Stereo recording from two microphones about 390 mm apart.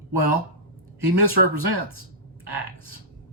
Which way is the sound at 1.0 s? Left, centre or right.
Right.